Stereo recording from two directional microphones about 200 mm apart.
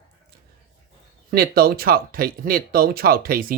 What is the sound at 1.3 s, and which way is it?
Speech, 50° right (ahead or behind).